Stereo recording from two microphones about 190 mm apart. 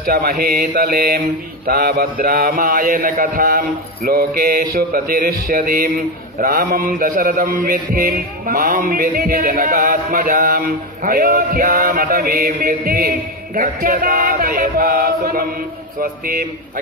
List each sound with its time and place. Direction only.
0.0 s speech: 55° right (ahead or behind)